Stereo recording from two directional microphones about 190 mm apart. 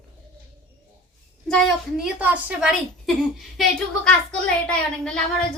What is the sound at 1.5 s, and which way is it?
A woman's voice, 5° right (ahead or behind).